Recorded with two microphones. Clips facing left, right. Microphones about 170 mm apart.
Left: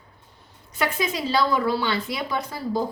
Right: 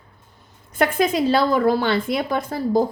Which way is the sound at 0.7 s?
50° right (ahead or behind).